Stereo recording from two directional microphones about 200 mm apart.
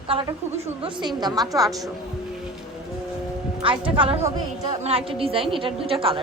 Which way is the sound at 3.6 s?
25° right (ahead or behind).